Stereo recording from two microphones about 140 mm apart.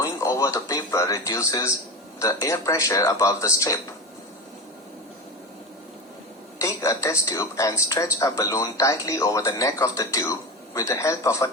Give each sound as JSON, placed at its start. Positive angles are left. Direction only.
{"t": 0.0, "sound": "speech", "side_deg": 20}
{"t": 6.6, "sound": "speech", "side_deg": 20}